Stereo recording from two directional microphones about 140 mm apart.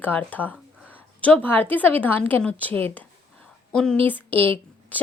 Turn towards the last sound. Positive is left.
turn(degrees=10)  # may be behind; listen again after turning